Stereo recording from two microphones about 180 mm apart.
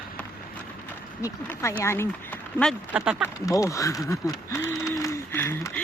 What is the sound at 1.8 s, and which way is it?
Speech, 15° left (ahead or behind).